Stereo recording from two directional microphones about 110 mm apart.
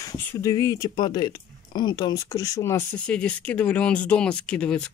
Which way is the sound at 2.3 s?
30° left (ahead or behind).